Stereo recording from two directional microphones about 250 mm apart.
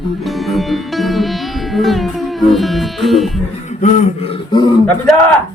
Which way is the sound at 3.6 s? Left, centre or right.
Left.